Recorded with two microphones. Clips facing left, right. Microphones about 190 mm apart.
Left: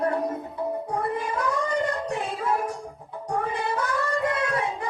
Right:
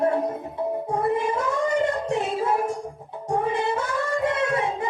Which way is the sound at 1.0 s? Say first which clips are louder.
Right 6 dB; 25° right (ahead or behind).